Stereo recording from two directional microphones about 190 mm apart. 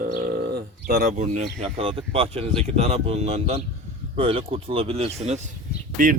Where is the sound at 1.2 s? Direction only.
35° right (ahead or behind).